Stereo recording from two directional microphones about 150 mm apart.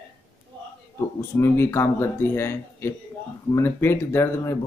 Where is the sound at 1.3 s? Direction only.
15° left (ahead or behind).